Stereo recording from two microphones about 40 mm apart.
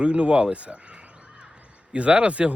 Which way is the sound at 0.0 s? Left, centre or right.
Right.